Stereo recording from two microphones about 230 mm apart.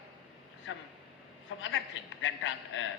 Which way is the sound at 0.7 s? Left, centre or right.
Left.